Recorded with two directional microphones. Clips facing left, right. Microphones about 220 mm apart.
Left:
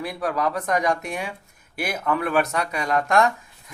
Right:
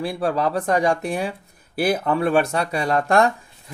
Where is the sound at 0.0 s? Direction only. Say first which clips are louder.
Right 3 dB; 30° right (ahead or behind).